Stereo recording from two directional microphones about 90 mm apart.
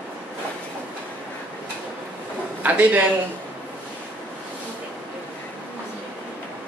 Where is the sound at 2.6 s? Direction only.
20° right (ahead or behind).